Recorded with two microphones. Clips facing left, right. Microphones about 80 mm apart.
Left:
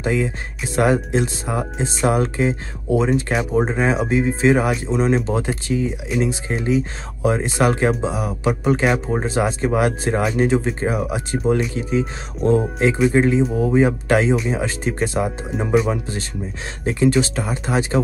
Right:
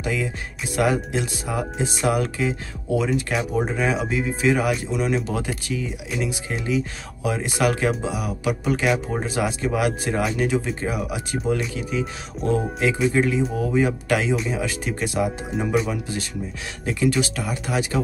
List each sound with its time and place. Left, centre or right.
0.0 s speech: left
3.5 s speech: left